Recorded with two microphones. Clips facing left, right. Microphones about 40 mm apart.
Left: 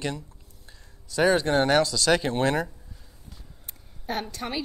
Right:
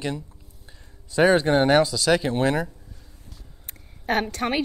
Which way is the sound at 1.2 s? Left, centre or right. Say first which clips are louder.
Right 3 dB; centre.